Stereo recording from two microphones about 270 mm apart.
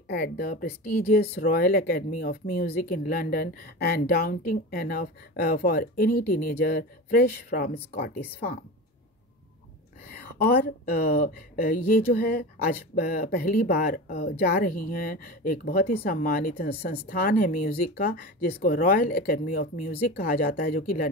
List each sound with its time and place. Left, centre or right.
0.1 s speech: left
10.0 s speech: left